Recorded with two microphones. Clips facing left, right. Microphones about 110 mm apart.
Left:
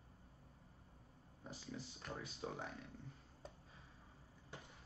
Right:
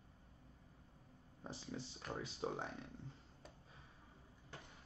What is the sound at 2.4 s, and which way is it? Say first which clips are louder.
Speech: right 4 dB; 30° right (ahead or behind).